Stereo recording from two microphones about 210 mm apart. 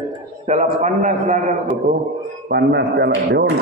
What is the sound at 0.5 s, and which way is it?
A man's voice, 35° right (ahead or behind).